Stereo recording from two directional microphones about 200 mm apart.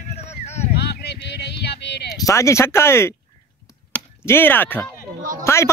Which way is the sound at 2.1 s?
15° left (ahead or behind).